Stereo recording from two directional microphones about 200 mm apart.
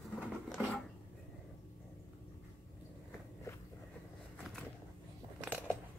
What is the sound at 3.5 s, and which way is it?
Walk, 15° left (ahead or behind).